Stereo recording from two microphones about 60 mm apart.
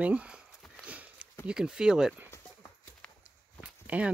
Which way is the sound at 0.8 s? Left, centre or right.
Right.